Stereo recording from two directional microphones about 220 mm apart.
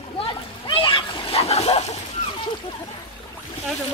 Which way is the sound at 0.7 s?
25° left (ahead or behind).